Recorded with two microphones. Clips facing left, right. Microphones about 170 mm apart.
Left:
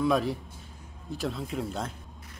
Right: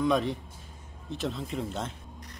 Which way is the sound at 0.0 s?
5° left (ahead or behind).